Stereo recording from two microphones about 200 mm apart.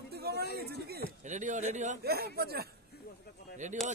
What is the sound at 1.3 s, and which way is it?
Speech, 35° right (ahead or behind).